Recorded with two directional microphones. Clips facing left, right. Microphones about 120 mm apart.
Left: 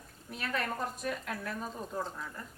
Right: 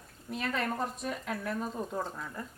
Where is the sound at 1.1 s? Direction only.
Centre (ahead or behind).